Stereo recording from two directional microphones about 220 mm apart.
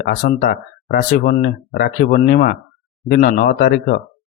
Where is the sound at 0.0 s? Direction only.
40° left (ahead or behind).